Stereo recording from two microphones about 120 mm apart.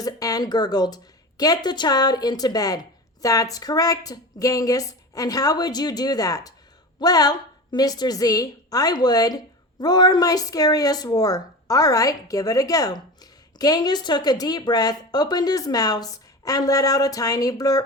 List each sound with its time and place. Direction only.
0.0 s a woman's voice: 30° left (ahead or behind)